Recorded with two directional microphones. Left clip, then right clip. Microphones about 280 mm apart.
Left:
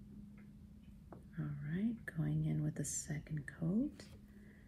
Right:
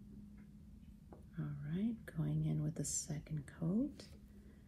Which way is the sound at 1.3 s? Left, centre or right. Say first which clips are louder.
Left 1 dB; centre.